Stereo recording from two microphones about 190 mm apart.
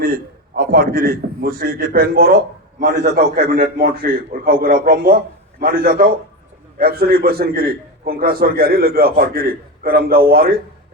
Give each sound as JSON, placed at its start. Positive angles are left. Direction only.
{"t": 0.0, "sound": "a man's voice", "side_deg": -50}